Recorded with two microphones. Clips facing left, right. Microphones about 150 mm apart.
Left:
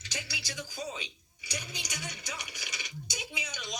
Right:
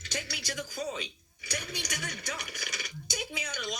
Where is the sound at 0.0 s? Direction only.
55° right (ahead or behind).